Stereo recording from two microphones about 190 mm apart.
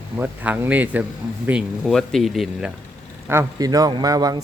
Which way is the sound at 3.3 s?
15° right (ahead or behind).